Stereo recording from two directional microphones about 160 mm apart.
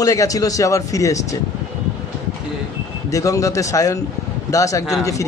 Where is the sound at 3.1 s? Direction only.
20° left (ahead or behind).